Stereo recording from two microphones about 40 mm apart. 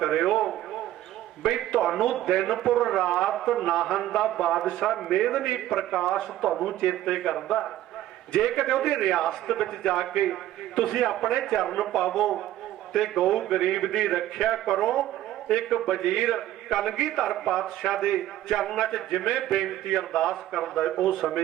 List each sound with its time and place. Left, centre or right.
0.0 s a sound: centre
2.3 s a man's voice: centre
6.0 s speech: centre
6.5 s a man's voice: centre
8.7 s a man's voice: centre
20.5 s speech: centre